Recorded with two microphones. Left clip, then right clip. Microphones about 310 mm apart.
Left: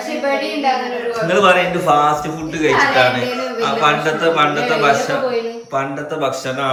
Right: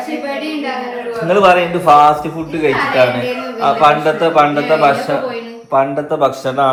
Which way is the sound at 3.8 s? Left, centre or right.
Centre.